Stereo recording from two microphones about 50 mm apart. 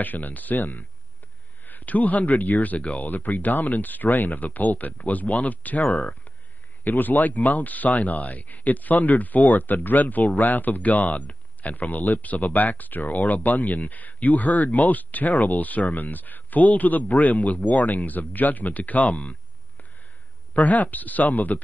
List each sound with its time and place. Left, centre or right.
0.0 s speech: left
6.8 s speech: left
20.5 s speech: left